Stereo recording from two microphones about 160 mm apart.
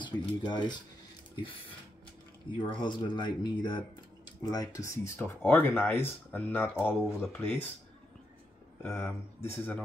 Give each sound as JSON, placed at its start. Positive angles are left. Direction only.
{"t": 0.0, "sound": "speech", "side_deg": 30}
{"t": 8.8, "sound": "speech", "side_deg": 15}